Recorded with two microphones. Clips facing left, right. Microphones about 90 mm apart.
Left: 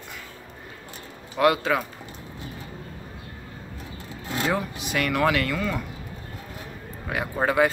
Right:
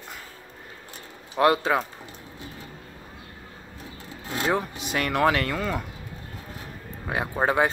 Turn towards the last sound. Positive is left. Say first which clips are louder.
# left 1 dB
turn(degrees=-30)  # may be behind; listen again after turning